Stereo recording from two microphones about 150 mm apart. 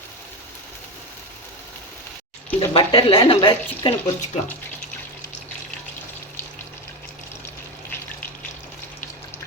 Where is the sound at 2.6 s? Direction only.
35° left (ahead or behind).